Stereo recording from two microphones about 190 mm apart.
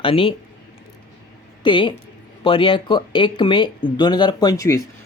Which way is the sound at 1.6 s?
25° left (ahead or behind).